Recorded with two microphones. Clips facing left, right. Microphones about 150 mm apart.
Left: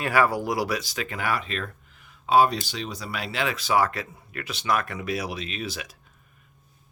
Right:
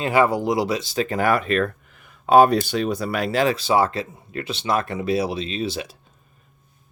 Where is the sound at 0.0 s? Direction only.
20° right (ahead or behind).